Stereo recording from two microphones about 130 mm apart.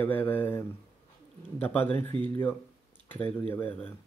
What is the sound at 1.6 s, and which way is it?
A man's voice, 15° left (ahead or behind).